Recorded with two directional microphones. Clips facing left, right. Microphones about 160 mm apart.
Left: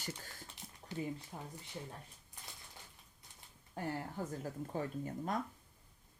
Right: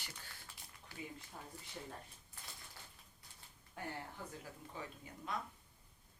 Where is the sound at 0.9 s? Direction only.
20° left (ahead or behind).